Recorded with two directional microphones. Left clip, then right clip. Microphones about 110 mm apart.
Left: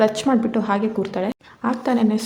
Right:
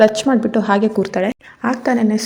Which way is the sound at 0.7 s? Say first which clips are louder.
Right 8 dB; 45° right (ahead or behind).